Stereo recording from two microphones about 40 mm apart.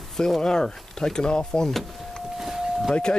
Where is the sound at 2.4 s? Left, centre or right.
Centre.